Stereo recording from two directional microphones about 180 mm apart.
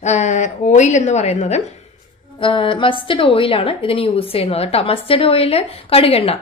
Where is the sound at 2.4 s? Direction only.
30° left (ahead or behind).